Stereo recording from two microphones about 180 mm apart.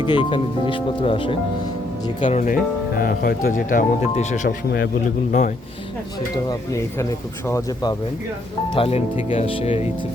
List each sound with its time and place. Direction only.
0.0 s speech: 25° left (ahead or behind)
2.2 s speech: 45° left (ahead or behind)
4.4 s speech: 65° left (ahead or behind)
7.0 s speech: 15° left (ahead or behind)
8.7 s speech: 35° left (ahead or behind)